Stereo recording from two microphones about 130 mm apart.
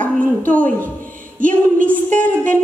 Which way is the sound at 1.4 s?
90° right.